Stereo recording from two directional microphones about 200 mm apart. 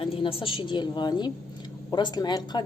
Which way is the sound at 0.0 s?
25° left (ahead or behind).